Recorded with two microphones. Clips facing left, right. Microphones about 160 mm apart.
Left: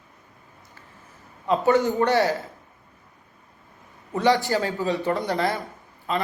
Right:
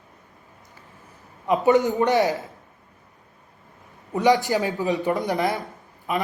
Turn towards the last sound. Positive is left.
turn(degrees=-15)  # may be behind; listen again after turning